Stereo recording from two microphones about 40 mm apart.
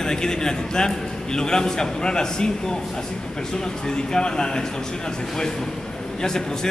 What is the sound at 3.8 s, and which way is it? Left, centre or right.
Speech, centre.